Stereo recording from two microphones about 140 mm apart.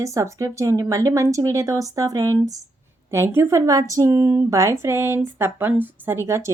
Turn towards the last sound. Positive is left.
turn(degrees=-20)  # may be behind; listen again after turning